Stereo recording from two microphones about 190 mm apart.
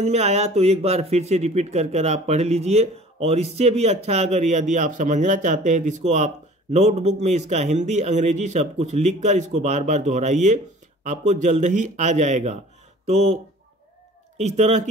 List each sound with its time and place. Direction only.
0.0 s speech: 35° right (ahead or behind)
14.4 s speech: 35° right (ahead or behind)